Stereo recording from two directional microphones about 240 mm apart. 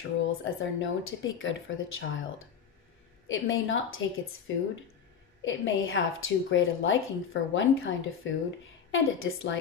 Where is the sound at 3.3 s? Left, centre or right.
Left.